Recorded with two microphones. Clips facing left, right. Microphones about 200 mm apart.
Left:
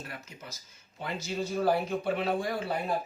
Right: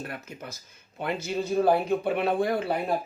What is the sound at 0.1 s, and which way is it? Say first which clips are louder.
Speech: right 6 dB; 55° right (ahead or behind).